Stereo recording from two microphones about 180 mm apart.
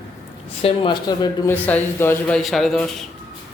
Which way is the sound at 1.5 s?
10° left (ahead or behind).